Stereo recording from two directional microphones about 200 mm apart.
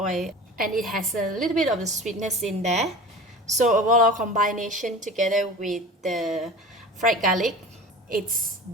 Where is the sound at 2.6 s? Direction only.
35° right (ahead or behind).